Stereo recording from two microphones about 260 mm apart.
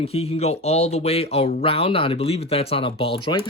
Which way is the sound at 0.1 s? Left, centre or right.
Left.